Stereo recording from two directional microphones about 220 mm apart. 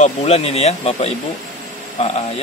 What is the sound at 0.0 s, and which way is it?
Speech, 30° left (ahead or behind).